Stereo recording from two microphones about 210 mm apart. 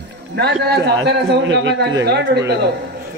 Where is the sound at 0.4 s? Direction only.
50° right (ahead or behind).